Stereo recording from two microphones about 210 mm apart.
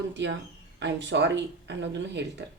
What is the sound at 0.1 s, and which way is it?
Speech, 60° right (ahead or behind).